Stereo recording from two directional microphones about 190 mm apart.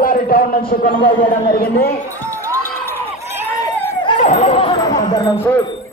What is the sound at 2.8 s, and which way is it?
Run, 10° left (ahead or behind).